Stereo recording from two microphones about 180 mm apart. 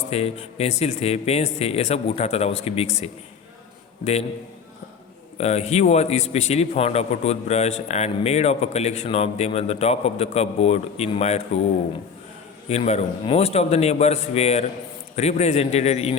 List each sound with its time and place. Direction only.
0.1 s a man's voice: 35° left (ahead or behind)
5.4 s a man's voice: 35° left (ahead or behind)
12.6 s a man's voice: 35° left (ahead or behind)